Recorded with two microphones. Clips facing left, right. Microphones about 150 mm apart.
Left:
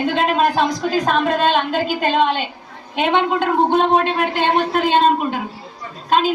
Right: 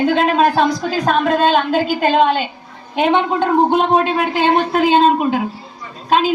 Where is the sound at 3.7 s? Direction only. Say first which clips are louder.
Right 1 dB; 5° right (ahead or behind).